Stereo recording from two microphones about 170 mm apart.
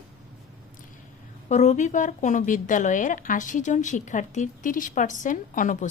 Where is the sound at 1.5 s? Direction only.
45° left (ahead or behind).